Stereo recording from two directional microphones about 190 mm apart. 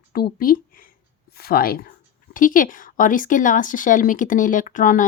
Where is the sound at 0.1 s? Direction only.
50° left (ahead or behind).